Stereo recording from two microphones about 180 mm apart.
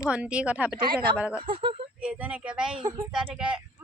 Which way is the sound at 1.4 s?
30° right (ahead or behind).